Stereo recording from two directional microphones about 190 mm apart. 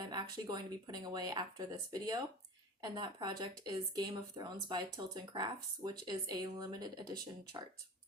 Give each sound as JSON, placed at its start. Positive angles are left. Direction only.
{"t": 0.0, "sound": "speech", "side_deg": -20}